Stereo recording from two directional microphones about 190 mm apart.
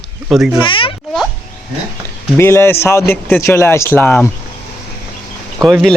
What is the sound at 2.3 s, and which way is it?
Speech, 15° left (ahead or behind).